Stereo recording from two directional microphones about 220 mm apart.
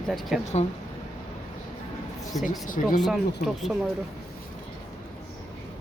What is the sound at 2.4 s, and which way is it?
Speech, 35° left (ahead or behind).